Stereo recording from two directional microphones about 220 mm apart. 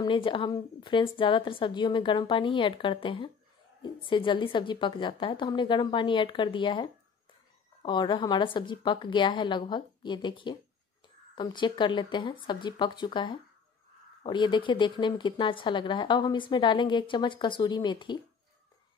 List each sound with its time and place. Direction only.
0.0 s a woman's voice: 20° left (ahead or behind)